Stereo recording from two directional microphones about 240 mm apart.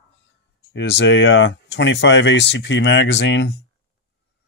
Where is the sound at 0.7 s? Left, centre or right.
Left.